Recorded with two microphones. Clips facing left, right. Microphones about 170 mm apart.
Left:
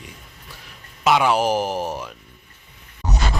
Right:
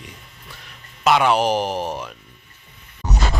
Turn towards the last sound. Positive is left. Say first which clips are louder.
# even
turn(degrees=15)  # may be behind; listen again after turning